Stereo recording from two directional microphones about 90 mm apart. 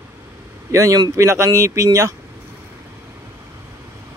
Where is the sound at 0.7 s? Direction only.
35° right (ahead or behind).